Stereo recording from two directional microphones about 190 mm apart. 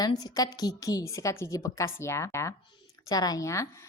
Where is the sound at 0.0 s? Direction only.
20° left (ahead or behind).